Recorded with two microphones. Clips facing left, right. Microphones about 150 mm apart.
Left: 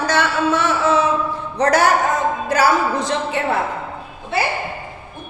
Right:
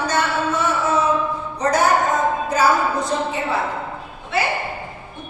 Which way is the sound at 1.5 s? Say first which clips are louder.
Left 2 dB; 75° left (ahead or behind).